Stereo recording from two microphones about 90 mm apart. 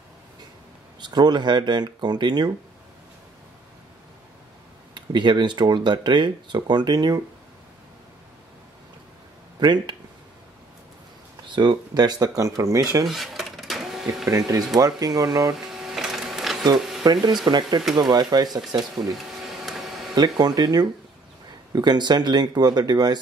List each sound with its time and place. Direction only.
1.0 s speech: 55° right (ahead or behind)
4.9 s speech: 60° right (ahead or behind)
9.6 s speech: 55° right (ahead or behind)
11.4 s speech: 60° right (ahead or behind); by 13.0 s 35° right (ahead or behind)
13.0 s cash register: centre (ahead or behind)
14.8 s speech: 45° right (ahead or behind)
15.5 s printer: 5° right (ahead or behind)
16.7 s a sound: 5° right (ahead or behind)
17.0 s speech: 50° right (ahead or behind)
19.1 s a sound: centre (ahead or behind)
20.3 s speech: 50° right (ahead or behind)